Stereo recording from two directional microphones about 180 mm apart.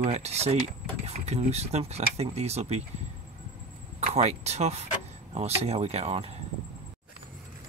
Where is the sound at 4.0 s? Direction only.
35° right (ahead or behind).